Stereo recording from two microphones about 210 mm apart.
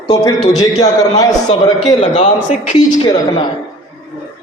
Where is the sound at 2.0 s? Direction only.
30° left (ahead or behind).